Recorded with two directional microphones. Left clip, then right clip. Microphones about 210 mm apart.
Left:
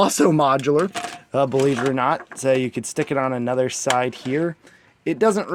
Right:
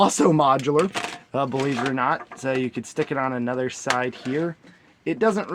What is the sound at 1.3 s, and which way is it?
Speech, 45° left (ahead or behind).